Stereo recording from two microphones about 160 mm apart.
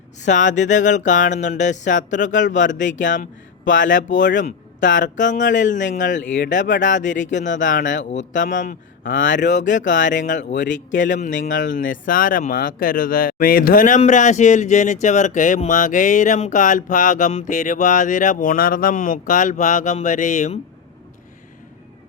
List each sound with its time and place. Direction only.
0.2 s speech: 50° left (ahead or behind)